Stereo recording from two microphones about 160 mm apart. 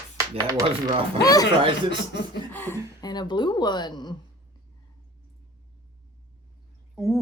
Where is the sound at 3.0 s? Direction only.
25° left (ahead or behind).